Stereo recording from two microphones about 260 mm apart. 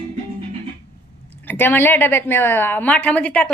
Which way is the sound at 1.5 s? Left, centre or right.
Centre.